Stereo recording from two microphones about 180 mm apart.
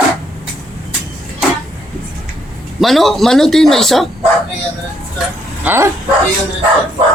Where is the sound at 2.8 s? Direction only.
Centre (ahead or behind).